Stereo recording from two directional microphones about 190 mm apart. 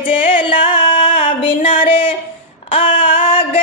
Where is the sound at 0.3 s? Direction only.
25° left (ahead or behind).